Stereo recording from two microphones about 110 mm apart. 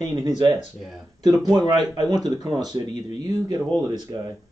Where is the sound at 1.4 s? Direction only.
35° right (ahead or behind).